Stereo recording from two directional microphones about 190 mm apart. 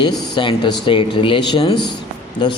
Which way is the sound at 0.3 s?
25° left (ahead or behind).